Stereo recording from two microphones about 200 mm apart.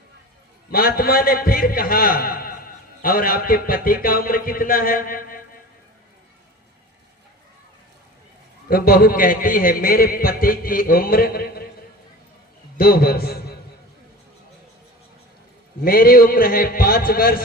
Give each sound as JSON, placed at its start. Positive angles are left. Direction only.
{"t": 0.7, "sound": "a man's voice", "side_deg": 50}
{"t": 8.7, "sound": "a man's voice", "side_deg": 50}
{"t": 12.7, "sound": "a man's voice", "side_deg": 50}
{"t": 15.8, "sound": "a man's voice", "side_deg": 45}